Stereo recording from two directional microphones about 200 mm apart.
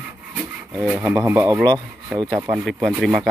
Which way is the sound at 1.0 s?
15° right (ahead or behind).